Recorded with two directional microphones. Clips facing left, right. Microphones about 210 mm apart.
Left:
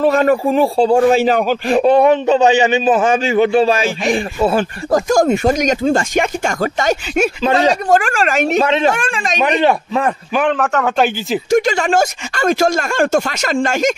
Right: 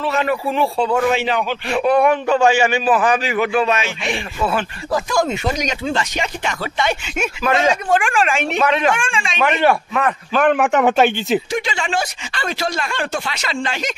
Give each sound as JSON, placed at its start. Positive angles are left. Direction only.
{"t": 0.0, "sound": "a man's voice", "side_deg": 45}
{"t": 2.0, "sound": "a man's voice", "side_deg": 20}
{"t": 4.9, "sound": "a man's voice", "side_deg": 45}
{"t": 8.6, "sound": "a man's voice", "side_deg": 25}
{"t": 8.9, "sound": "a man's voice", "side_deg": 40}
{"t": 9.4, "sound": "a man's voice", "side_deg": 20}
{"t": 10.5, "sound": "a man's voice", "side_deg": -15}
{"t": 11.0, "sound": "speech", "side_deg": 0}
{"t": 11.5, "sound": "speech", "side_deg": 45}